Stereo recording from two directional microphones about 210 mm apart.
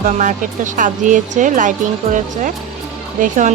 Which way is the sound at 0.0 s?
35° right (ahead or behind).